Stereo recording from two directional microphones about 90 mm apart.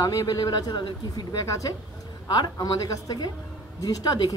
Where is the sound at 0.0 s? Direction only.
40° left (ahead or behind).